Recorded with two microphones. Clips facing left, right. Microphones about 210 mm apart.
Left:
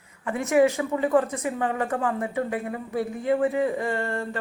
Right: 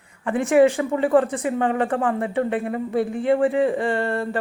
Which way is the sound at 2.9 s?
80° right.